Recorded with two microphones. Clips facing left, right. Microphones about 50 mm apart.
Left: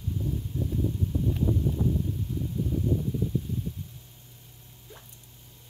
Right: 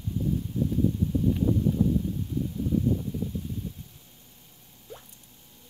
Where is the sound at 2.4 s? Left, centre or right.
Centre.